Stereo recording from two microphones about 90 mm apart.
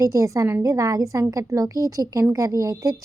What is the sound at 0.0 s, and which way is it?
A woman's voice, 35° right (ahead or behind).